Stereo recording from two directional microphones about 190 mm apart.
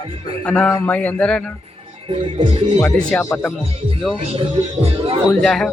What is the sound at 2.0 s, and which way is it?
Music, 30° right (ahead or behind).